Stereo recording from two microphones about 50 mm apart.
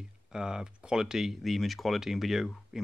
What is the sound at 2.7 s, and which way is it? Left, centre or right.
Music, centre.